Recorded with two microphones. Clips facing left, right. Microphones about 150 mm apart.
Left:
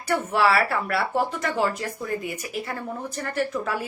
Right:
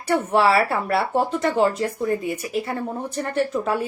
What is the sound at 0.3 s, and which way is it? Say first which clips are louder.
Speech: right 3 dB; 30° right (ahead or behind).